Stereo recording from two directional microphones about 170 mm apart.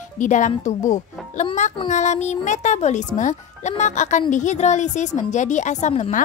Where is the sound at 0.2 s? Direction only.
45° left (ahead or behind).